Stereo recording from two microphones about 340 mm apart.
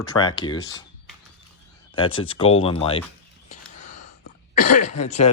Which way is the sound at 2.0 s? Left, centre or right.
Centre.